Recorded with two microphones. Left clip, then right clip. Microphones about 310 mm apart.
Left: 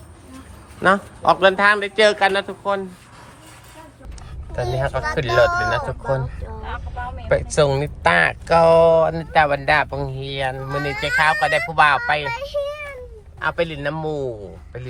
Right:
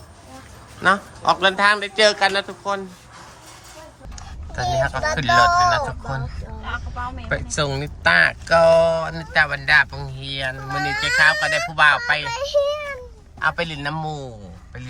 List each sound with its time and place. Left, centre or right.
0.8 s a man's voice: centre
4.5 s a man's voice: centre
7.3 s speech: centre
13.4 s a man's voice: centre